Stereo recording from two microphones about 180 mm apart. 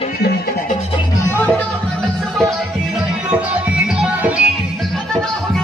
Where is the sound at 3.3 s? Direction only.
5° right (ahead or behind).